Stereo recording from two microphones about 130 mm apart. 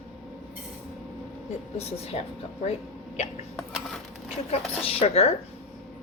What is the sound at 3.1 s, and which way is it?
Hiccup, 55° left (ahead or behind).